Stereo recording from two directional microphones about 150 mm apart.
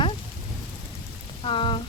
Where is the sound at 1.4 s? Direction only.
35° left (ahead or behind).